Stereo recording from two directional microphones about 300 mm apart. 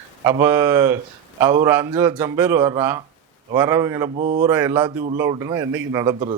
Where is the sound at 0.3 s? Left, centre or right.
Centre.